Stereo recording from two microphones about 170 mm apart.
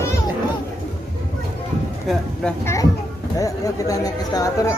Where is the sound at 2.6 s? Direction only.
20° left (ahead or behind).